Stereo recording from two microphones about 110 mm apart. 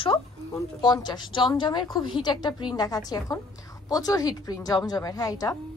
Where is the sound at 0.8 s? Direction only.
40° left (ahead or behind).